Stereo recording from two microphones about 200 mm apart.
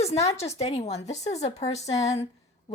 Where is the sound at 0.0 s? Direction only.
30° left (ahead or behind).